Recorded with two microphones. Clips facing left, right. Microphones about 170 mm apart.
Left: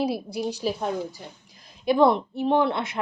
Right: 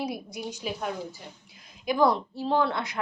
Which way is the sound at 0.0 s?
30° left (ahead or behind).